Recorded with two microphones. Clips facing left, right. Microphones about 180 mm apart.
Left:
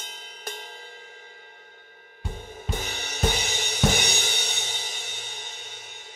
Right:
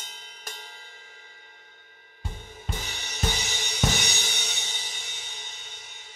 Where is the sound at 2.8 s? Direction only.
55° left (ahead or behind).